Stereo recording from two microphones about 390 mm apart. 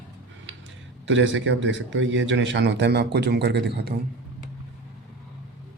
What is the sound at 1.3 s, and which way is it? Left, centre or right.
A man's voice, right.